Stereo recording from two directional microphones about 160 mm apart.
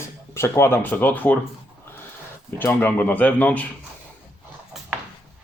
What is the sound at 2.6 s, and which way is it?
A man's voice, 10° left (ahead or behind).